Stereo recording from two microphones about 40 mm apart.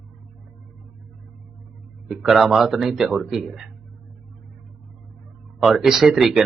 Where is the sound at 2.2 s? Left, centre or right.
Centre.